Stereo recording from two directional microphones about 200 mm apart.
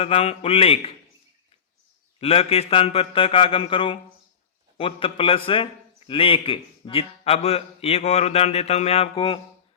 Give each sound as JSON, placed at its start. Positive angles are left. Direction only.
{"t": 0.0, "sound": "a man's voice", "side_deg": 30}
{"t": 2.2, "sound": "a man's voice", "side_deg": 30}